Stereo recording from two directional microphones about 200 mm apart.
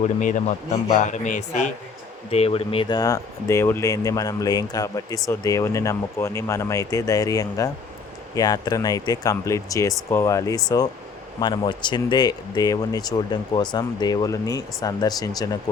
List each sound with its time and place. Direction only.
0.2 s speech: 40° left (ahead or behind); by 15.3 s 20° left (ahead or behind)